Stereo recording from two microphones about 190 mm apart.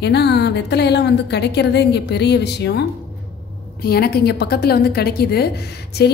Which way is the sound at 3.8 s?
55° left (ahead or behind).